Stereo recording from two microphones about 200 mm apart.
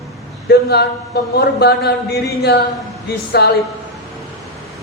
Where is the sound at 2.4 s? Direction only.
55° left (ahead or behind).